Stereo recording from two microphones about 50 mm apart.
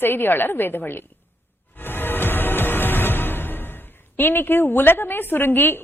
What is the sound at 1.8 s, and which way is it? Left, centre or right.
Music, left.